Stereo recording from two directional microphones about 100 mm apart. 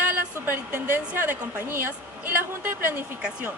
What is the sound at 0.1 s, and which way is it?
A woman's voice, 20° right (ahead or behind).